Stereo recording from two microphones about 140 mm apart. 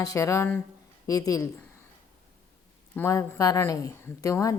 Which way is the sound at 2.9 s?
20° left (ahead or behind).